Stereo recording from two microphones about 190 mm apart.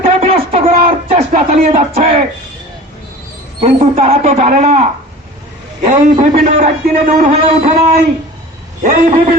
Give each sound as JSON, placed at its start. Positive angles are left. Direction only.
{"t": 0.0, "sound": "a sound", "side_deg": -30}
{"t": 1.1, "sound": "music", "side_deg": -40}
{"t": 3.6, "sound": "a man's voice", "side_deg": -30}